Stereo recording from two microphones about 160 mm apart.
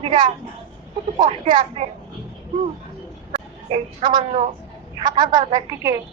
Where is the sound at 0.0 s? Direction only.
35° right (ahead or behind).